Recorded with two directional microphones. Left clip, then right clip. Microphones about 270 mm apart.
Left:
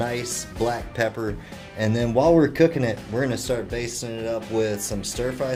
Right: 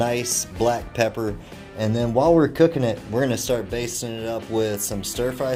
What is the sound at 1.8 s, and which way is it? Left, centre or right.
Speech, centre.